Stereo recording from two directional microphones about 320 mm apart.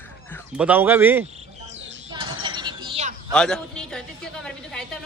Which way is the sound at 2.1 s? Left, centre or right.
Centre.